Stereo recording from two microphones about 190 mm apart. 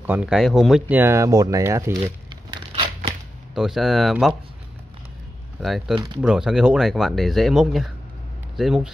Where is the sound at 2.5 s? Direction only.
30° right (ahead or behind).